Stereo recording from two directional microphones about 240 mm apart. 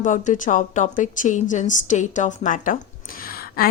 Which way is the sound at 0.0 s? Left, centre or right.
Left.